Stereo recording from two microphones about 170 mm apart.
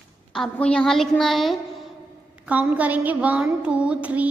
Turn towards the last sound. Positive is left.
turn(degrees=-10)  # may be behind; listen again after turning